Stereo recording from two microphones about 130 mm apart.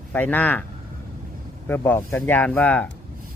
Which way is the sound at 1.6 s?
15° left (ahead or behind).